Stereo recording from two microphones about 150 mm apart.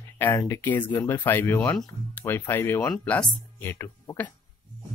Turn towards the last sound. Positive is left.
turn(degrees=15)  # may be behind; listen again after turning